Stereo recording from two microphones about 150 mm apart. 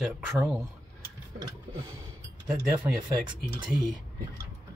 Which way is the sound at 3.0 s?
30° right (ahead or behind).